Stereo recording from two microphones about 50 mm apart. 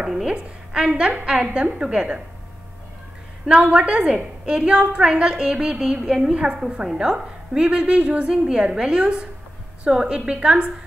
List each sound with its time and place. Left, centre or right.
0.0 s a woman's voice: centre
3.4 s a woman's voice: centre